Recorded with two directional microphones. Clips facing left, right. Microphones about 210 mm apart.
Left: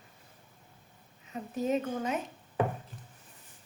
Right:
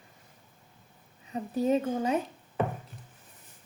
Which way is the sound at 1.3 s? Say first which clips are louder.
Right 4 dB; 30° right (ahead or behind).